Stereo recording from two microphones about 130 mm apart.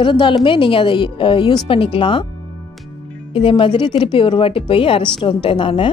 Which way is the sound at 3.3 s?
45° left (ahead or behind).